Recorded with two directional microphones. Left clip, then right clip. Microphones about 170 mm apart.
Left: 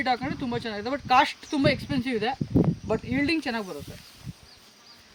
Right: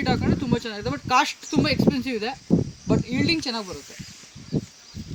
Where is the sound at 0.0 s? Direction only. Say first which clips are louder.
Right 2 dB; 10° left (ahead or behind).